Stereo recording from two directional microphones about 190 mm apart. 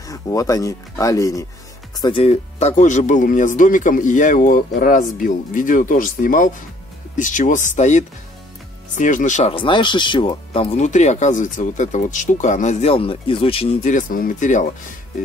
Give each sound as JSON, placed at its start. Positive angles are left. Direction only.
{"t": 0.0, "sound": "speech", "side_deg": 15}